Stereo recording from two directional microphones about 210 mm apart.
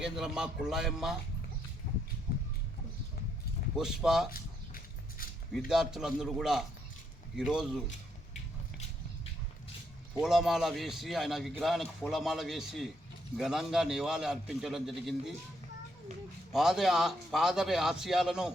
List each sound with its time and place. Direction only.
0.0 s a man's voice: 5° right (ahead or behind)
3.8 s a man's voice: 5° right (ahead or behind)
4.3 s a sound: 45° left (ahead or behind)
5.5 s a man's voice: centre (ahead or behind)
10.2 s a man's voice: centre (ahead or behind)
16.5 s a man's voice: centre (ahead or behind)